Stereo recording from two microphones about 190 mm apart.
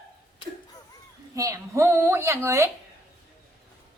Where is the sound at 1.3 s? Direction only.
15° right (ahead or behind).